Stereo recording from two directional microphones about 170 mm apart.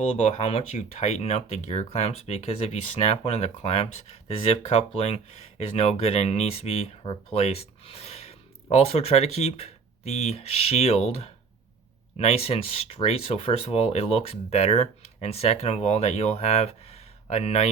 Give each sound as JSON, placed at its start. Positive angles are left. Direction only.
{"t": 0.2, "sound": "speech", "side_deg": 40}